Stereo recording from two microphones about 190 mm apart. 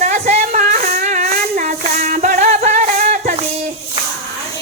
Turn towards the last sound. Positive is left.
turn(degrees=-40)  # may be behind; listen again after turning